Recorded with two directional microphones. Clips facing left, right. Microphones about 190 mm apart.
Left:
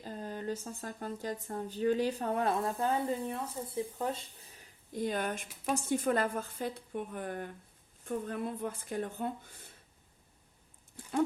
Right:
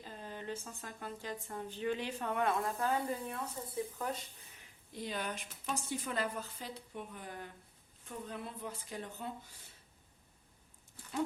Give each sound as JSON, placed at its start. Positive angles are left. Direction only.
{"t": 0.0, "sound": "speech", "side_deg": 40}
{"t": 4.9, "sound": "a woman's voice", "side_deg": 50}